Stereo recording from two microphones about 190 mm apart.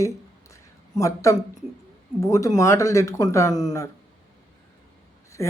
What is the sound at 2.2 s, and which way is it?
Speech, 15° left (ahead or behind).